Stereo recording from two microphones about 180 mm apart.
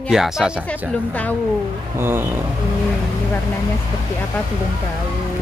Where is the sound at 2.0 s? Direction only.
10° right (ahead or behind).